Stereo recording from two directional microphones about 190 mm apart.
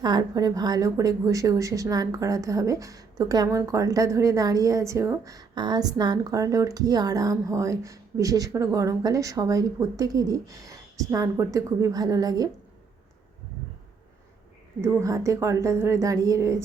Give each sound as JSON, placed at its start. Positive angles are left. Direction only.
{"t": 0.0, "sound": "speech", "side_deg": -20}
{"t": 14.8, "sound": "speech", "side_deg": -15}